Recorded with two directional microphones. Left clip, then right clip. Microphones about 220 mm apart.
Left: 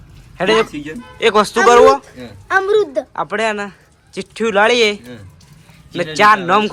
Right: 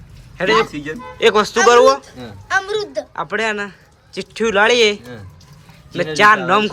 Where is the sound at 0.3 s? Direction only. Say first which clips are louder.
Left 1 dB; centre (ahead or behind).